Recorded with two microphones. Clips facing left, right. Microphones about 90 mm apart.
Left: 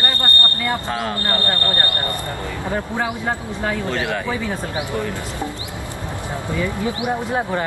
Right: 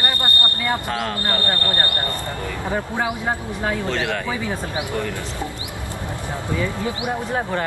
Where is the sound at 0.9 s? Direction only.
15° left (ahead or behind).